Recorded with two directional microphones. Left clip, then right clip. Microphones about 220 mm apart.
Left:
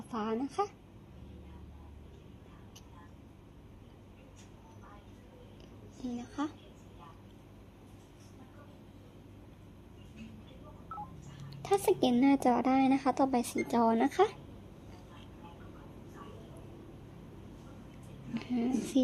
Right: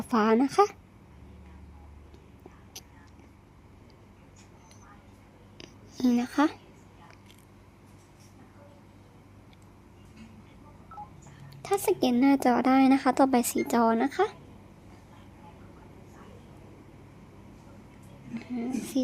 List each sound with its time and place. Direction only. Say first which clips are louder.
0.1 s a woman's voice: right 12 dB; 25° right (ahead or behind)
5.5 s a sound: right 16 dB; 40° right (ahead or behind)
10.9 s telephone dialing: even; centre (ahead or behind)
11.5 s a woman's voice: right 2 dB; 10° right (ahead or behind)
18.3 s a woman's voice: even; centre (ahead or behind)